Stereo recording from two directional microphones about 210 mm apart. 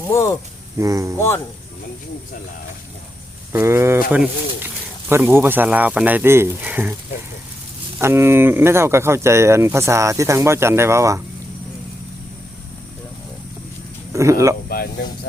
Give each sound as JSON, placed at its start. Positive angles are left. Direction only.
{"t": 0.1, "sound": "speech", "side_deg": 15}
{"t": 0.8, "sound": "speech", "side_deg": -15}
{"t": 3.5, "sound": "speech", "side_deg": -10}
{"t": 8.0, "sound": "speech", "side_deg": -10}
{"t": 14.1, "sound": "speech", "side_deg": -15}
{"t": 14.7, "sound": "speech", "side_deg": 45}